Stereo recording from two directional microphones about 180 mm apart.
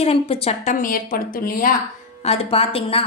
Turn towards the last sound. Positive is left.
turn(degrees=30)  # may be behind; listen again after turning